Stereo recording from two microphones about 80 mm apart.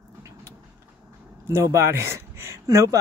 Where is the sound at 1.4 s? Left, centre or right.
Right.